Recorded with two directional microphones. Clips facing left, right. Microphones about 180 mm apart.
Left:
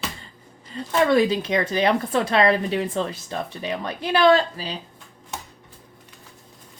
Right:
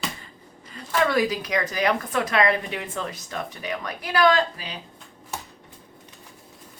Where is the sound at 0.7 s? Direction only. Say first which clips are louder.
Left 4 dB; 25° left (ahead or behind).